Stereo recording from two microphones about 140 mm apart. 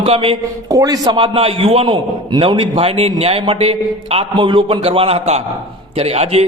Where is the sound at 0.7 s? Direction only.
25° right (ahead or behind).